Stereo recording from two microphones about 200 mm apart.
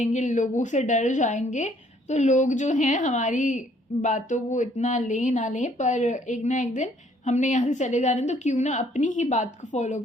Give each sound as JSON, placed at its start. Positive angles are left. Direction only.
{"t": 0.0, "sound": "speech", "side_deg": 35}